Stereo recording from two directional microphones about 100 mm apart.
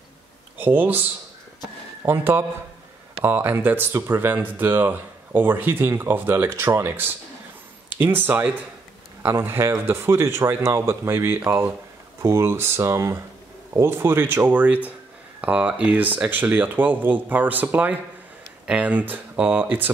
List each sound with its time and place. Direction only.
0.6 s speech: 20° right (ahead or behind)